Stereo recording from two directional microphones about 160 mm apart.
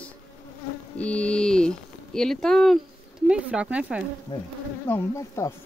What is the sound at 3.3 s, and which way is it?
Speech, 10° right (ahead or behind).